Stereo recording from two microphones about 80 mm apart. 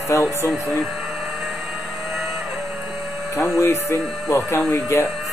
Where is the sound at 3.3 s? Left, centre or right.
Left.